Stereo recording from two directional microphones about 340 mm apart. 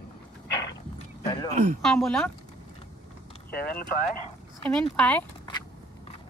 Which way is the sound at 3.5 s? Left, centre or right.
Left.